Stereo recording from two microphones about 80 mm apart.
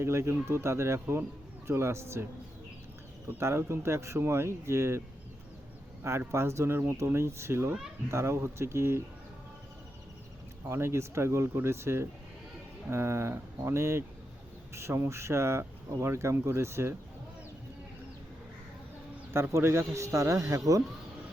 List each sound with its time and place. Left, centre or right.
0.0 s speech: right
3.2 s speech: right
10.7 s speech: right
19.3 s speech: right